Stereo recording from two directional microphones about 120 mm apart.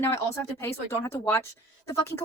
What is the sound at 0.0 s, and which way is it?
A woman's voice, 20° left (ahead or behind).